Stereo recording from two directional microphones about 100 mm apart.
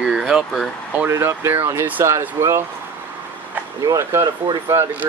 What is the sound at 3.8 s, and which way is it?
Speech, 30° right (ahead or behind).